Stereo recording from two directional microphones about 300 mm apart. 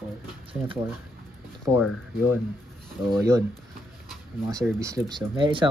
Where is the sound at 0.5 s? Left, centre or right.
Centre.